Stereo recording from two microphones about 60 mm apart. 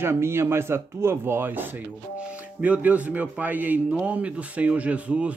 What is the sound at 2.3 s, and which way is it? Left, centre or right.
Speech, right.